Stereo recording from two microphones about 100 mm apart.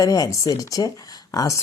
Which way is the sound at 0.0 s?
35° left (ahead or behind).